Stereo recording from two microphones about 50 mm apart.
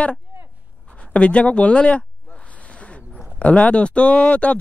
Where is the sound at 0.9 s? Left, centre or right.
Left.